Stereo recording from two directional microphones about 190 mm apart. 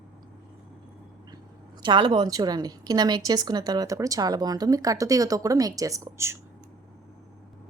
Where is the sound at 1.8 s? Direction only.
25° right (ahead or behind).